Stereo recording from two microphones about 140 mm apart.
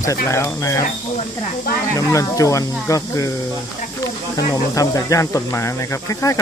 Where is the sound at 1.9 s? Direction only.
25° left (ahead or behind).